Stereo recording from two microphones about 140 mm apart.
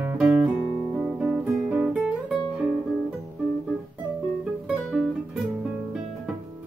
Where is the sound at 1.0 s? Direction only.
5° right (ahead or behind).